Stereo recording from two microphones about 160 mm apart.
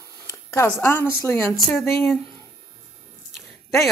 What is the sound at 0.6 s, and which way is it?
Speech, 15° left (ahead or behind).